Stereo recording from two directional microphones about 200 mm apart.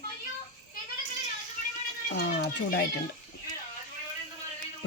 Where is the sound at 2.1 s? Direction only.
55° left (ahead or behind).